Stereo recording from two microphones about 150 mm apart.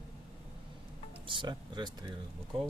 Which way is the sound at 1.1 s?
35° right (ahead or behind).